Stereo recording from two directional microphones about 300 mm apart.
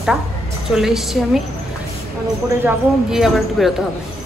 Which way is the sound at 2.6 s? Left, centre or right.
Centre.